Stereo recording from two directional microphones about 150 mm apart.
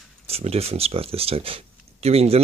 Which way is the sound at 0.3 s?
45° right (ahead or behind).